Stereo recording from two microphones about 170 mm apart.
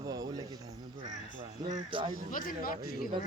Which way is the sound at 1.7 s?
30° right (ahead or behind).